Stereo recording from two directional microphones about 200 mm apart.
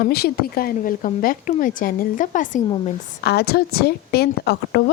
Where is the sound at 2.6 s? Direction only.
25° left (ahead or behind).